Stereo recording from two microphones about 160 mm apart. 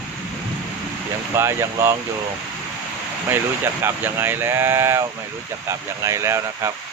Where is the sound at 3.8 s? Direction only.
15° right (ahead or behind).